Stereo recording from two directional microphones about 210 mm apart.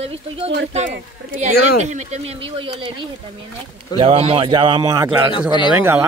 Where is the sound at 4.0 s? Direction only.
25° right (ahead or behind).